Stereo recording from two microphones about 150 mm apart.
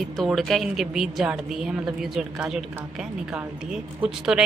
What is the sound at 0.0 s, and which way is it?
Speech, centre (ahead or behind).